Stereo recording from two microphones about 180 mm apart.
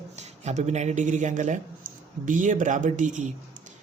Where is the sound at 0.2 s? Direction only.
40° right (ahead or behind).